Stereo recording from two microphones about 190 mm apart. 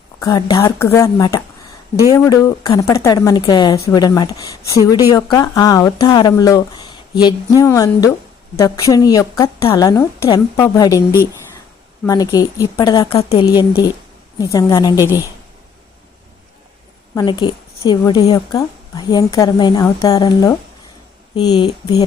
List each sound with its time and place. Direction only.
0.2 s speech: 20° left (ahead or behind)
12.0 s speech: 20° left (ahead or behind)
13.4 s speech: 20° left (ahead or behind)
17.2 s speech: 25° left (ahead or behind)